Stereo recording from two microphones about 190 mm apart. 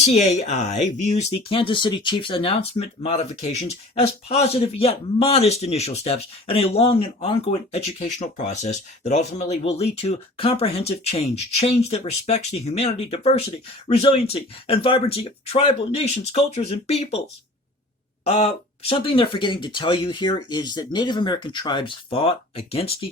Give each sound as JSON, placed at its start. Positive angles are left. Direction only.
{"t": 0.0, "sound": "speech", "side_deg": 35}
{"t": 18.3, "sound": "speech", "side_deg": 30}